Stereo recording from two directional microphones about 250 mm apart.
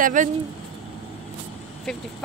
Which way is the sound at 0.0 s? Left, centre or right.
Right.